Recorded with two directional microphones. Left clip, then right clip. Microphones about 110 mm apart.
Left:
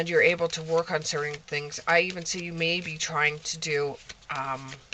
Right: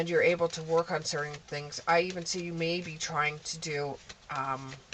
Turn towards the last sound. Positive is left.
turn(degrees=35)  # may be behind; listen again after turning